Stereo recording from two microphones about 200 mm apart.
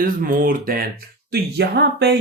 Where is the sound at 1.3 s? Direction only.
55° right (ahead or behind).